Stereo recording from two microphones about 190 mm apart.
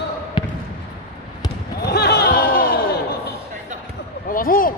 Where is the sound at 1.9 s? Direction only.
60° left (ahead or behind).